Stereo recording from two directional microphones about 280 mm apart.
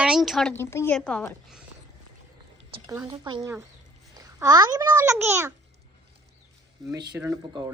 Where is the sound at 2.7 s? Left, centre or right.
Centre.